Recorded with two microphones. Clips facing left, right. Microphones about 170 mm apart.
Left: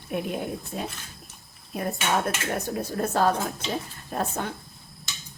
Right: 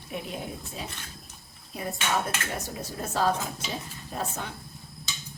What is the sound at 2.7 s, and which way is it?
A woman's voice, 60° left (ahead or behind).